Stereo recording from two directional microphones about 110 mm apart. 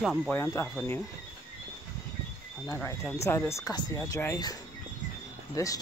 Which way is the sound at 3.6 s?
35° left (ahead or behind).